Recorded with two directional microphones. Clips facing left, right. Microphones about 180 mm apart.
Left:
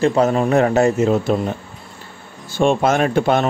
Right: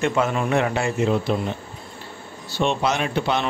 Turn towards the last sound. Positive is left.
turn(degrees=50)  # may be behind; listen again after turning